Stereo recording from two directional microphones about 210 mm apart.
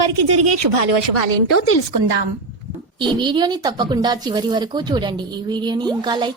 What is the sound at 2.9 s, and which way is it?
Speech, 20° right (ahead or behind).